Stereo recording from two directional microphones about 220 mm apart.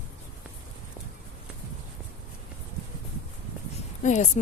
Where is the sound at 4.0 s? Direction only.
35° left (ahead or behind).